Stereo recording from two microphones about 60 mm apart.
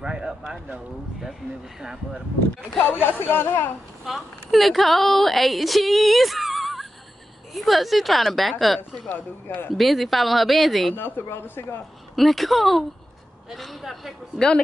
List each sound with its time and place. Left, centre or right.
0.0 s a sound: centre
2.8 s speech: left
4.0 s speech: centre
11.0 s speech: left
12.2 s speech: centre